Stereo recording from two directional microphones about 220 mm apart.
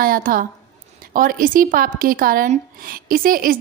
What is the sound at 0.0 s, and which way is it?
Speech, 40° right (ahead or behind).